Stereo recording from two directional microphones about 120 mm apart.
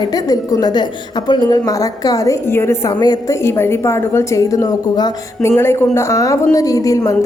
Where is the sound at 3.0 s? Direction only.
35° left (ahead or behind).